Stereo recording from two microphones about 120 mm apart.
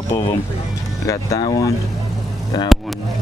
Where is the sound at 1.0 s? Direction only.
30° left (ahead or behind).